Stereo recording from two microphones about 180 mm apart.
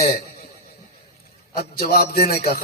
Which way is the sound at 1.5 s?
60° left (ahead or behind).